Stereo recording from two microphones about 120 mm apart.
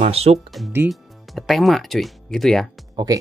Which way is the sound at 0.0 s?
60° right (ahead or behind).